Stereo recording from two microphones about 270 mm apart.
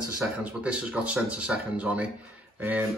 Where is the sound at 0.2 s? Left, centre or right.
Centre.